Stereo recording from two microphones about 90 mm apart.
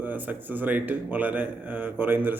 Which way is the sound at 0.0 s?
20° right (ahead or behind).